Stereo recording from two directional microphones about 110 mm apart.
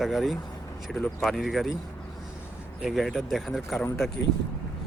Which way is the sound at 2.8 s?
Centre (ahead or behind).